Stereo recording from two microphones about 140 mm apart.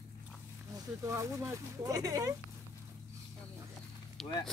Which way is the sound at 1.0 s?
20° right (ahead or behind).